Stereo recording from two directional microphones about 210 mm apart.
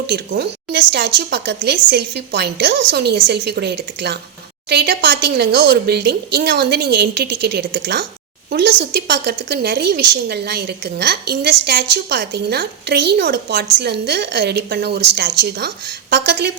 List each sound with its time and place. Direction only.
0.1 s a woman's voice: 50° right (ahead or behind)